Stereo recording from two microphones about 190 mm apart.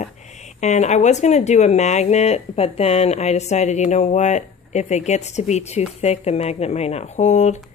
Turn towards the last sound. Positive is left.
turn(degrees=40)  # may be behind; listen again after turning